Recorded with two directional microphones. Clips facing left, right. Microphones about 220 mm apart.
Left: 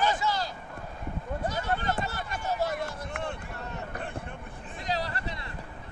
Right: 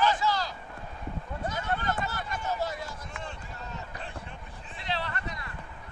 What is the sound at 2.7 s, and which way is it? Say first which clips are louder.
Run: left 5 dB; 60° left (ahead or behind).